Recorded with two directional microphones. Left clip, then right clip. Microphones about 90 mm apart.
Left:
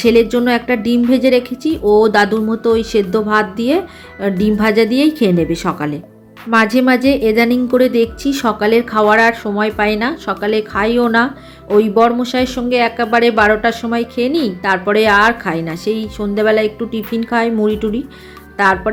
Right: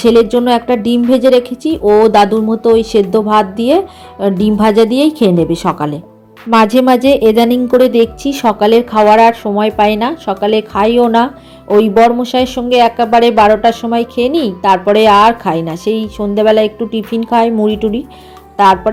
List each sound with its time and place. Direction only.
0.0 s a woman's voice: 35° right (ahead or behind)